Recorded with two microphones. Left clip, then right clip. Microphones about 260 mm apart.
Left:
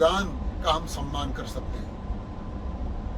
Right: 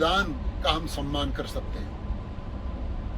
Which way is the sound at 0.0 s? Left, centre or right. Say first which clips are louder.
Left 2 dB; centre.